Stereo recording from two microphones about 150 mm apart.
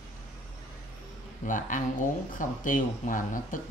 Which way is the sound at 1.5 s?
60° left (ahead or behind).